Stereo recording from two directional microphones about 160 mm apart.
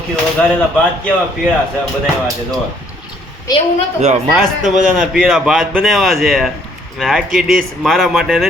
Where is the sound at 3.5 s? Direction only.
25° left (ahead or behind).